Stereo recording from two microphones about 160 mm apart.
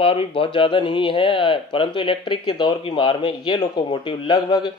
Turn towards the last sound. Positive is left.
turn(degrees=25)  # may be behind; listen again after turning